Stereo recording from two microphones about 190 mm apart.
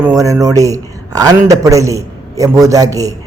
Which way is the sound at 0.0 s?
15° right (ahead or behind).